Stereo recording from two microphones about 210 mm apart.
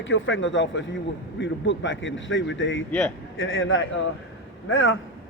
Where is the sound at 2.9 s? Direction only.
5° left (ahead or behind).